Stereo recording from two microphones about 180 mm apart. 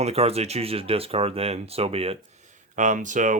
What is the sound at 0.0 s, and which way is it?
Speech, 35° right (ahead or behind).